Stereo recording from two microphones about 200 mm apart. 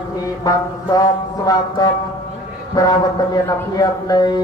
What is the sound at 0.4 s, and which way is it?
Speech, 20° left (ahead or behind).